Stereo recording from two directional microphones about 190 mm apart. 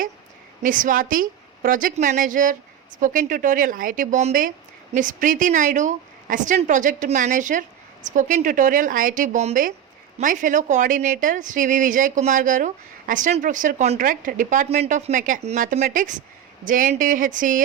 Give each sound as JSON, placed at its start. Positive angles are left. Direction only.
{"t": 0.6, "sound": "speech", "side_deg": -45}